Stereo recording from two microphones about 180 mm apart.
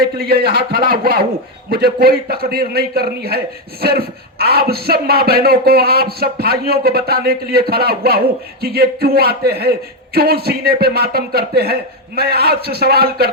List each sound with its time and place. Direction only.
0.0 s a man's voice: 60° right (ahead or behind)